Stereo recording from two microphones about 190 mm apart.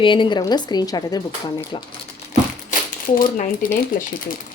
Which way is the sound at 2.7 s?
45° left (ahead or behind).